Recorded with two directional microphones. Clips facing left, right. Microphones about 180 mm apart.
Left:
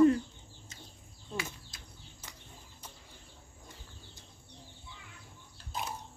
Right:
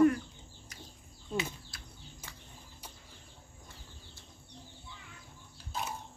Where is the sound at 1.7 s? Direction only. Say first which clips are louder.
Right 1 dB; 20° left (ahead or behind).